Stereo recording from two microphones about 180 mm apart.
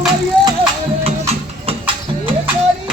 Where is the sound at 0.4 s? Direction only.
25° right (ahead or behind).